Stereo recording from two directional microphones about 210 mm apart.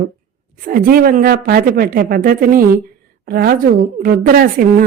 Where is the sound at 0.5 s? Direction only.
40° right (ahead or behind).